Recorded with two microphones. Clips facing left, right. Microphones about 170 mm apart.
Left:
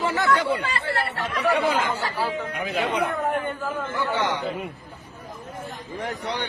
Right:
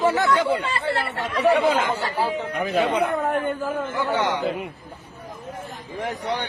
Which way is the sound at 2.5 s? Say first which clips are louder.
Right 4 dB; 50° right (ahead or behind).